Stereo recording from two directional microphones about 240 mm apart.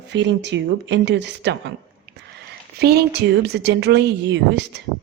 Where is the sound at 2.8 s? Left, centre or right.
Right.